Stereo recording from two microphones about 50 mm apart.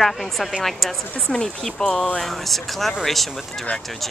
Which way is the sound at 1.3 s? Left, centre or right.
Centre.